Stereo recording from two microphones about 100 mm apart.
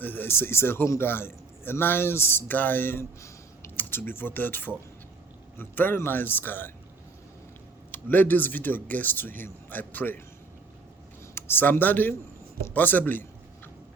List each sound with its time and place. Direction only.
0.0 s a man's voice: 20° left (ahead or behind)
7.9 s a man's voice: 20° left (ahead or behind)
11.3 s speech: 20° left (ahead or behind)